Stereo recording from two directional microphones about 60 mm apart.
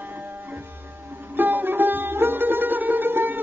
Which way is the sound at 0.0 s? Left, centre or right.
Right.